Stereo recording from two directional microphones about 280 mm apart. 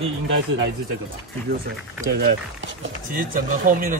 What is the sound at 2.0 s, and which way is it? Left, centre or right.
Speech, right.